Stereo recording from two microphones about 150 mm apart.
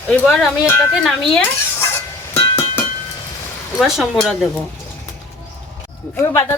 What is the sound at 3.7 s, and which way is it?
Speech, centre (ahead or behind).